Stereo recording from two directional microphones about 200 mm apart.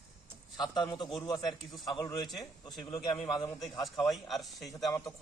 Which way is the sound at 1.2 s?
20° left (ahead or behind).